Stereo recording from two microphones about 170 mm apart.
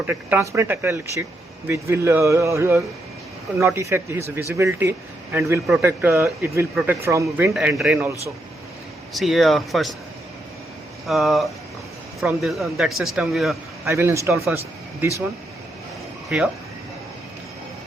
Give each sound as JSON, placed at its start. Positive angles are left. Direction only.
{"t": 0.0, "sound": "speech", "side_deg": -10}
{"t": 7.5, "sound": "speech", "side_deg": -5}
{"t": 9.1, "sound": "speech", "side_deg": 0}
{"t": 11.0, "sound": "speech", "side_deg": 0}
{"t": 13.8, "sound": "speech", "side_deg": -15}
{"t": 16.3, "sound": "speech", "side_deg": -5}